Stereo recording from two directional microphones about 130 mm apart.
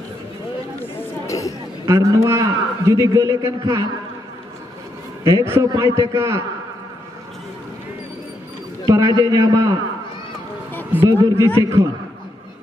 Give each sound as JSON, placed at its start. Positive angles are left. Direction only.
{"t": 1.2, "sound": "a sound", "side_deg": 25}
{"t": 1.9, "sound": "a man's voice", "side_deg": -25}
{"t": 5.2, "sound": "a man's voice", "side_deg": -20}
{"t": 8.8, "sound": "a man's voice", "side_deg": -30}
{"t": 10.7, "sound": "a sound", "side_deg": 15}
{"t": 11.0, "sound": "a man's voice", "side_deg": -20}